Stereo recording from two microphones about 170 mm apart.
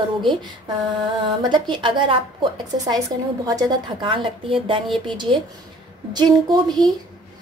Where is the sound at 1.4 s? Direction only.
25° right (ahead or behind).